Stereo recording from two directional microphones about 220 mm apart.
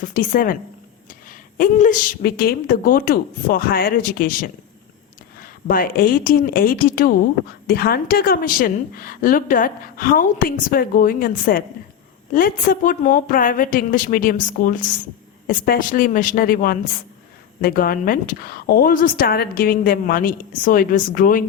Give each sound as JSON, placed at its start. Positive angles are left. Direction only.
{"t": 0.0, "sound": "a woman's voice", "side_deg": 40}